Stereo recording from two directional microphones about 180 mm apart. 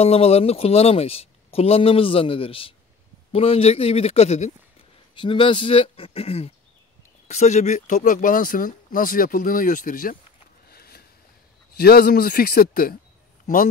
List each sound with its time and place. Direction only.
0.0 s speech: 35° left (ahead or behind); by 10.1 s 50° left (ahead or behind)
10.7 s a sound: 60° left (ahead or behind)
11.7 s speech: 60° left (ahead or behind)